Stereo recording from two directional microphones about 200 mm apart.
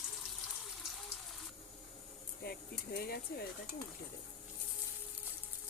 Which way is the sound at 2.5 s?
55° left (ahead or behind).